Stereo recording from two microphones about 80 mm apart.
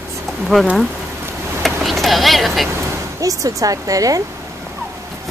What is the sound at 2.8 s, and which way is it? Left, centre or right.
Speech, right.